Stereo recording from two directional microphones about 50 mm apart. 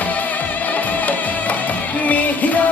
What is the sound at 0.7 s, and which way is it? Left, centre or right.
Music, left.